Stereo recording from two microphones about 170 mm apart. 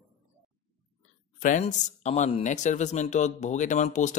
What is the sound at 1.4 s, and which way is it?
Speech, 50° left (ahead or behind).